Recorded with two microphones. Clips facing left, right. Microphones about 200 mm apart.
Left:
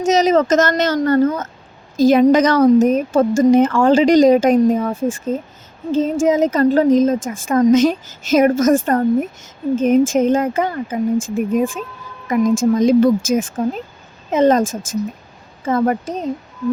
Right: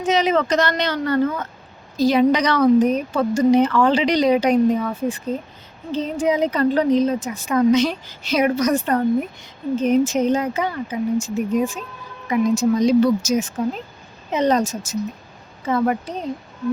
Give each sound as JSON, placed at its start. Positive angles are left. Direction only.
{"t": 0.0, "sound": "a woman's voice", "side_deg": 40}